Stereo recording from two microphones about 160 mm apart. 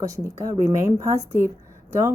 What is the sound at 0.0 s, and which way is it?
A woman's voice, 20° right (ahead or behind).